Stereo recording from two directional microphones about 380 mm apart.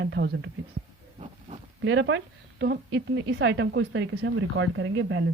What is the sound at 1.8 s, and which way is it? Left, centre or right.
A woman's voice, right.